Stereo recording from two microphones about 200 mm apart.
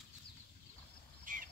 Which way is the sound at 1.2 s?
40° right (ahead or behind).